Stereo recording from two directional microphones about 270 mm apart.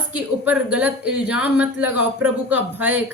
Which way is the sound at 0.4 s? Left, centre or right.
Centre.